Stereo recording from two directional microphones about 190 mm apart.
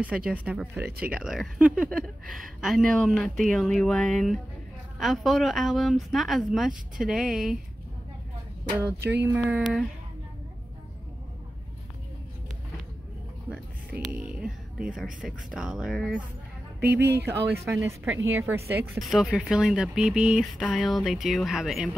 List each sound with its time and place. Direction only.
0.3 s a woman's voice: 10° right (ahead or behind)
8.7 s a woman's voice: 10° right (ahead or behind)
13.5 s a woman's voice: 5° right (ahead or behind)
17.0 s speech: 60° right (ahead or behind)
17.6 s a woman's voice: 15° right (ahead or behind)
18.9 s a woman's voice: centre (ahead or behind)